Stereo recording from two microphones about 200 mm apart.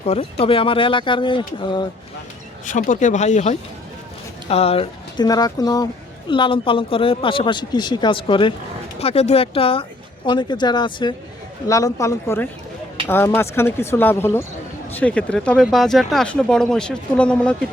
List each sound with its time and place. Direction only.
0.0 s speech: 30° left (ahead or behind)
2.6 s speech: 40° left (ahead or behind); by 17.7 s 5° left (ahead or behind)